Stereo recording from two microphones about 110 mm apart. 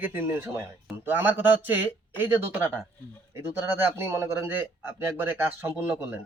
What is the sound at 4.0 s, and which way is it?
A man's voice, 25° right (ahead or behind).